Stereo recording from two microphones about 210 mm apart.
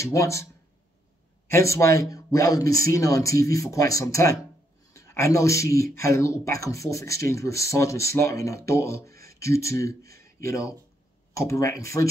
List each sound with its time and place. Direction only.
0.0 s speech: 15° left (ahead or behind)
1.5 s speech: 15° left (ahead or behind)